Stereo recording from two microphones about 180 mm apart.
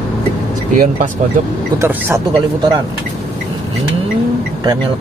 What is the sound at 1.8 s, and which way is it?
Speech, 15° right (ahead or behind).